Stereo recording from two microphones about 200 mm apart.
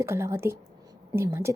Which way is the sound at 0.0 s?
15° right (ahead or behind).